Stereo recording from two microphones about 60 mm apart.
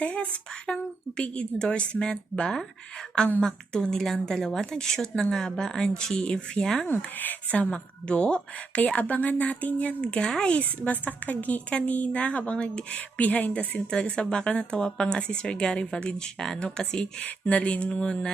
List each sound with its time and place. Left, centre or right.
0.0 s a woman's voice: left
6.8 s a woman's voice: left